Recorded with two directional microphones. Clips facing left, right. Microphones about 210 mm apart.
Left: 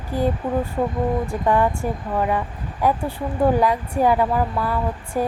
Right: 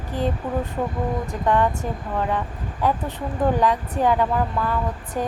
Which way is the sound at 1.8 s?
10° left (ahead or behind).